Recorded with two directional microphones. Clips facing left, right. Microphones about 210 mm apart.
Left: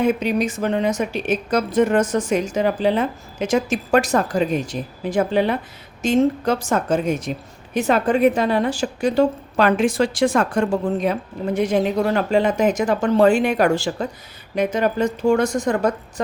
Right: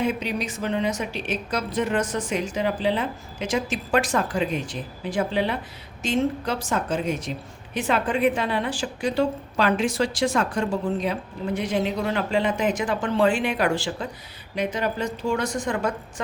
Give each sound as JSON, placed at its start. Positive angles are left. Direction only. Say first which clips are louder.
{"t": 0.0, "sound": "a woman's voice", "louder": "left 7 dB", "side_deg": 50}